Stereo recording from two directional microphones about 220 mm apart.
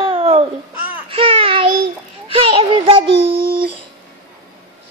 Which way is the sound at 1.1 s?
25° right (ahead or behind).